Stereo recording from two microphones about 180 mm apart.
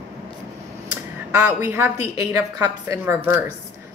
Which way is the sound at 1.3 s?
15° right (ahead or behind).